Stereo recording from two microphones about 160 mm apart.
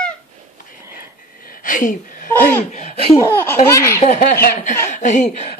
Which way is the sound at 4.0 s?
50° left (ahead or behind).